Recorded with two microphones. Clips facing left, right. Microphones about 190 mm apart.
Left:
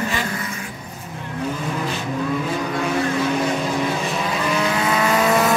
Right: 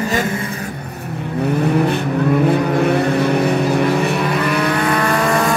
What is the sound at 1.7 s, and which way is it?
Vehicle, 60° right (ahead or behind).